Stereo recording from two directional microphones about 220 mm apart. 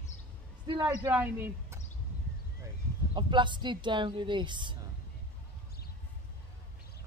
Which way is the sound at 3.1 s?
20° right (ahead or behind).